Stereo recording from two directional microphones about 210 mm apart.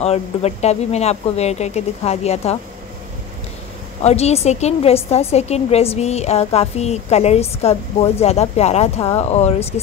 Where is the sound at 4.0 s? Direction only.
30° left (ahead or behind).